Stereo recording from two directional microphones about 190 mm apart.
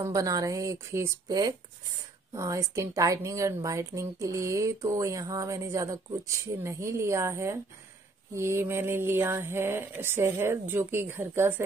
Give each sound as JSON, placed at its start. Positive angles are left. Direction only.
{"t": 0.0, "sound": "a woman's voice", "side_deg": -15}